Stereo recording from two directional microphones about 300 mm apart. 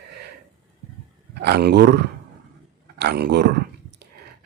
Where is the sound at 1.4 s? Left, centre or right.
Right.